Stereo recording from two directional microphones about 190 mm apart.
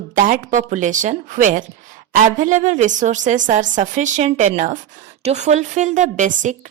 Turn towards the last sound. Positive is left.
turn(degrees=-40)  # may be behind; listen again after turning